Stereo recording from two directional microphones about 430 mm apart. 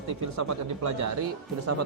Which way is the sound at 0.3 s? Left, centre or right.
Right.